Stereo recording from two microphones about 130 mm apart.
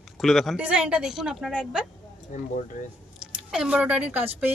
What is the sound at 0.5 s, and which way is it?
A woman's voice, 10° right (ahead or behind).